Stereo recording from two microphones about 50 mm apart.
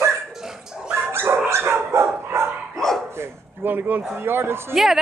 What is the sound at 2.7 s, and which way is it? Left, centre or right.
Dog, centre.